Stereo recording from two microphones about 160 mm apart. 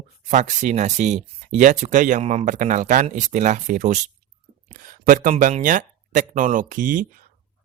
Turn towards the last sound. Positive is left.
turn(degrees=-55)  # may be behind; listen again after turning